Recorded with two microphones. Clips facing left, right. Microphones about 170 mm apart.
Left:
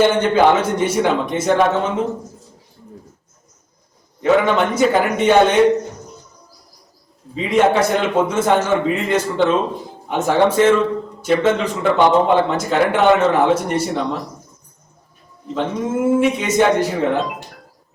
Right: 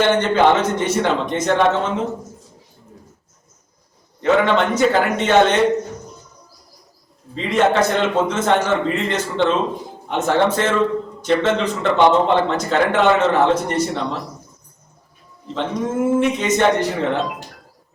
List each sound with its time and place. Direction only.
0.0 s a man's voice: 10° left (ahead or behind)
4.2 s a man's voice: 10° left (ahead or behind)
7.3 s a man's voice: 10° left (ahead or behind)
15.5 s a man's voice: 5° left (ahead or behind)